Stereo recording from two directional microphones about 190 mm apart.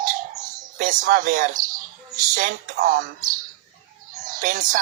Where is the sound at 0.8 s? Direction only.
45° right (ahead or behind).